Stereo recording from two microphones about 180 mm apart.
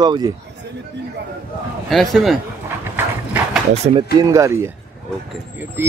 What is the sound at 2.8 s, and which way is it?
Clip-clop, 10° right (ahead or behind).